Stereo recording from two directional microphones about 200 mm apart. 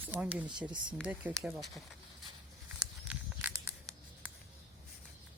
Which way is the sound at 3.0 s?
5° right (ahead or behind).